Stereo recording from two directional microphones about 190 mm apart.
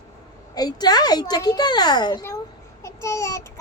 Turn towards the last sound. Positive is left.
turn(degrees=15)  # may be behind; listen again after turning